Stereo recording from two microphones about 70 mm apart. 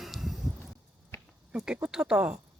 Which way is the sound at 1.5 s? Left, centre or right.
Centre.